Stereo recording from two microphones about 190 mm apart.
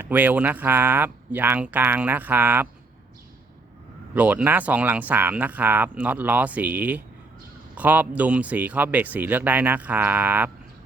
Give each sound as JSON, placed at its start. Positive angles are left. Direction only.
{"t": 0.0, "sound": "speech", "side_deg": -10}
{"t": 4.1, "sound": "speech", "side_deg": -10}